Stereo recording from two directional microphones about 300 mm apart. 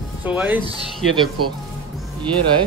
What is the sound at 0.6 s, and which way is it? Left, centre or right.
Speech, centre.